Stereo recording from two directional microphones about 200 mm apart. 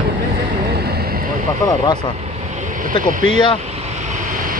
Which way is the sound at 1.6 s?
20° left (ahead or behind).